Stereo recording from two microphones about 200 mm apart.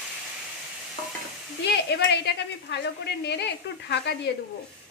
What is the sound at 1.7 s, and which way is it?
A woman's voice, 55° left (ahead or behind).